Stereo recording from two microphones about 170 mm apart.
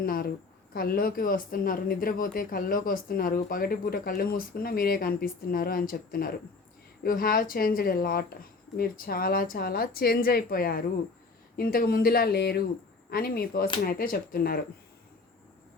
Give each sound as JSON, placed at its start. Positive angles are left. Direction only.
{"t": 0.0, "sound": "speech", "side_deg": 60}